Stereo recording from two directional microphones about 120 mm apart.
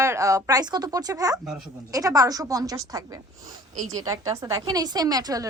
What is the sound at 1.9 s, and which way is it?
Speech, 30° right (ahead or behind).